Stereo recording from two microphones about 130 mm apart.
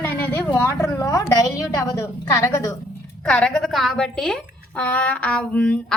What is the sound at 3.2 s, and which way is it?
A woman's voice, 10° left (ahead or behind).